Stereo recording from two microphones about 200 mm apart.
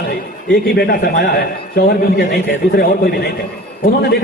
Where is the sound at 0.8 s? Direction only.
55° left (ahead or behind).